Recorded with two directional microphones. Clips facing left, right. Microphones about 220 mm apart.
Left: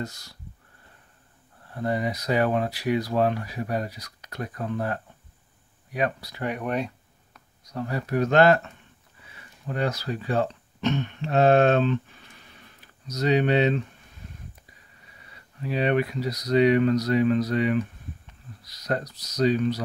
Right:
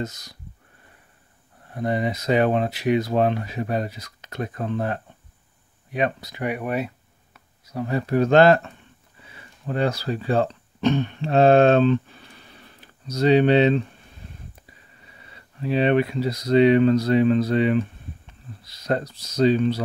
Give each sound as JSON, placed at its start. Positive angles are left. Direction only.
{"t": 0.0, "sound": "speech", "side_deg": -20}
{"t": 1.7, "sound": "speech", "side_deg": -20}
{"t": 7.3, "sound": "a sound", "side_deg": -5}
{"t": 7.9, "sound": "speech", "side_deg": -30}
{"t": 14.2, "sound": "a sound", "side_deg": -30}
{"t": 15.6, "sound": "speech", "side_deg": -25}